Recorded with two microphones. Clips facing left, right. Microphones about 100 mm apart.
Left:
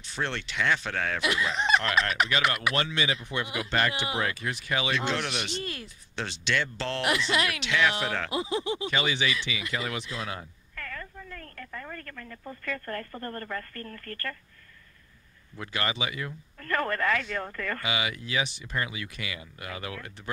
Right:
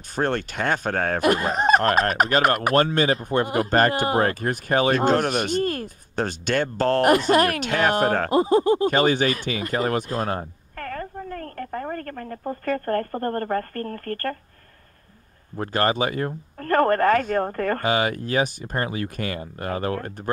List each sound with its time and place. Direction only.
0.1 s speech: 45° right (ahead or behind)
15.5 s speech: 45° right (ahead or behind)